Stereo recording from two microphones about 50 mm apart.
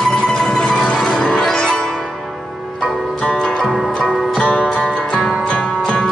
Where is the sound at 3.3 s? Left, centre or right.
Centre.